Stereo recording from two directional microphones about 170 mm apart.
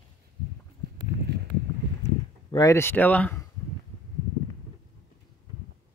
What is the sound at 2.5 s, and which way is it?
Speech, 20° left (ahead or behind).